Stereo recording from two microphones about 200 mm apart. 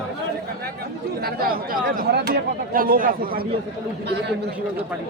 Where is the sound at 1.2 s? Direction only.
45° right (ahead or behind).